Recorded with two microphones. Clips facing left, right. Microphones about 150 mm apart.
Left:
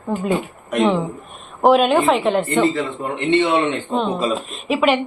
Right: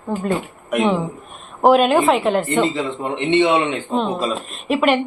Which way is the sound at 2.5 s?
20° right (ahead or behind).